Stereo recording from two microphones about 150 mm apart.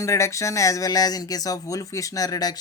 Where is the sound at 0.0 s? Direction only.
20° left (ahead or behind).